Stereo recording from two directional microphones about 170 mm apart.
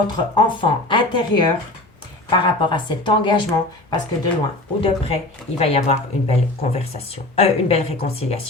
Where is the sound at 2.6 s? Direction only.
30° left (ahead or behind).